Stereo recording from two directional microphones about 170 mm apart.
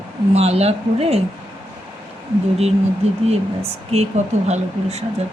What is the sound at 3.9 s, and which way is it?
Speech, 40° right (ahead or behind).